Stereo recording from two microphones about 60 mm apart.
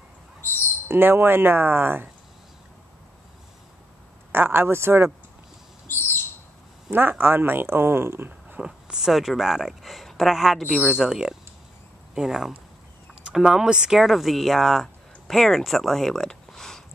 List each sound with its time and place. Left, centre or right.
0.8 s speech: right
4.3 s speech: right
6.9 s speech: right
8.5 s speech: centre